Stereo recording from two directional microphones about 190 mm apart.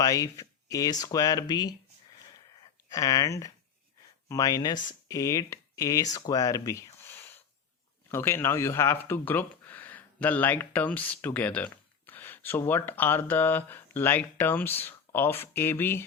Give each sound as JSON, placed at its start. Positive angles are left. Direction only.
{"t": 0.0, "sound": "speech", "side_deg": 20}
{"t": 2.9, "sound": "speech", "side_deg": 20}